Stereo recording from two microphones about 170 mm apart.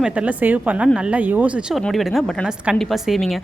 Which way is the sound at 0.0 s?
5° right (ahead or behind).